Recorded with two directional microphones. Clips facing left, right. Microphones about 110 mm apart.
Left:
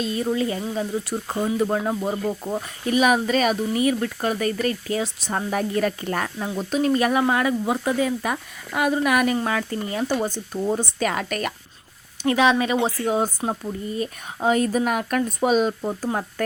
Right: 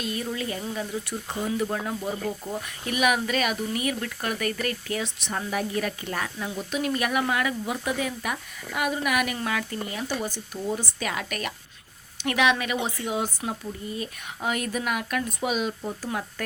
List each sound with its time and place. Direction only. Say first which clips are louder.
0.0 s speech: left 7 dB; 30° left (ahead or behind)
12.2 s speech: left 5 dB; 30° left (ahead or behind)